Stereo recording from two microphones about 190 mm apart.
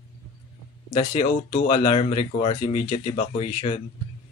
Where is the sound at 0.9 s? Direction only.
30° left (ahead or behind).